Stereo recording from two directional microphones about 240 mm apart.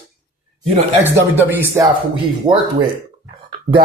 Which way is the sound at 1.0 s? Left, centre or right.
Centre.